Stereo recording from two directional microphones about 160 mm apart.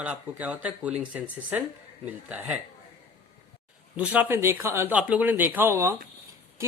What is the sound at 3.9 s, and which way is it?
Speech, 10° right (ahead or behind).